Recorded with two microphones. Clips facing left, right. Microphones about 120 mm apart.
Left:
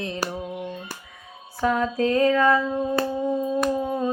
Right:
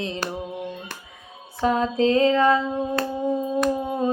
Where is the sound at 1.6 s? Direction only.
25° right (ahead or behind).